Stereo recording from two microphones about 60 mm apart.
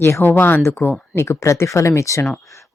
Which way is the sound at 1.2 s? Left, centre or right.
Left.